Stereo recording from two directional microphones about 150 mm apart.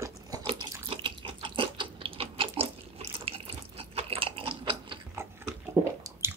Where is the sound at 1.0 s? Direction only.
35° right (ahead or behind).